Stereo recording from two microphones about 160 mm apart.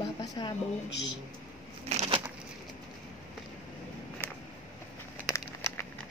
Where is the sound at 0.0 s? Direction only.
30° left (ahead or behind).